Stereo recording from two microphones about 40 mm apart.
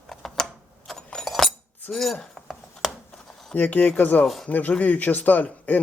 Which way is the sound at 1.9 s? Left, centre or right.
Centre.